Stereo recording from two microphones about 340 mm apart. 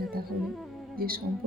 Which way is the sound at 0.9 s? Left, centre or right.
Right.